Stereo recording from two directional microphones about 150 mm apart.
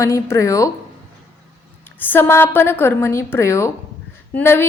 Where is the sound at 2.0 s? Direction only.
15° left (ahead or behind).